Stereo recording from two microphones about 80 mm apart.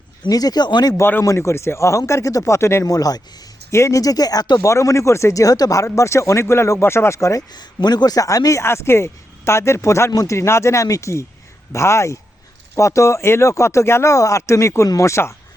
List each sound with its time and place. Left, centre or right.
0.3 s speech: left
0.9 s speech: left
2.8 s speech: left
3.7 s speech: left
4.6 s speech: left
7.5 s speech: left
10.1 s speech: left
10.3 s speech: left